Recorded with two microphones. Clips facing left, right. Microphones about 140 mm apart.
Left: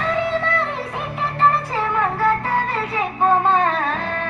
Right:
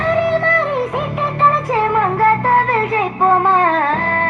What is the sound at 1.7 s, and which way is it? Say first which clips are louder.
Child singing: right 6 dB; 60° right (ahead or behind).